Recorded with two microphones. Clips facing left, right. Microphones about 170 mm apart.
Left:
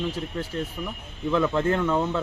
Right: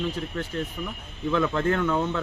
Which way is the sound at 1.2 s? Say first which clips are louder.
Left 1 dB; 5° left (ahead or behind).